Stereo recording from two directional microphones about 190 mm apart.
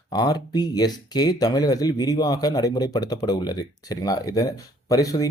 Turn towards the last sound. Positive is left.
turn(degrees=20)  # may be behind; listen again after turning